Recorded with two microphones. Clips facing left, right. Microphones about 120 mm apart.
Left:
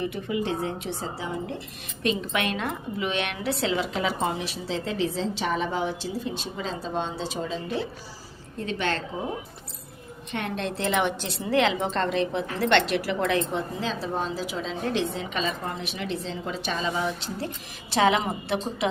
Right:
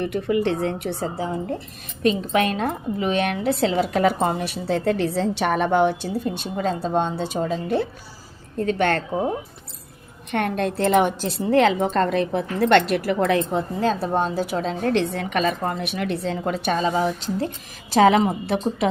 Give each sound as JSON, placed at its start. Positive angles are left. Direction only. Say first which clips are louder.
{"t": 0.0, "sound": "a woman's voice", "louder": "right 6 dB", "side_deg": -65}
{"t": 2.0, "sound": "a woman's voice", "louder": "right 6 dB", "side_deg": -40}
{"t": 10.3, "sound": "a woman's voice", "louder": "right 7 dB", "side_deg": -55}
{"t": 13.7, "sound": "a woman's voice", "louder": "right 7 dB", "side_deg": -55}
{"t": 16.8, "sound": "a woman's voice", "louder": "right 6 dB", "side_deg": -35}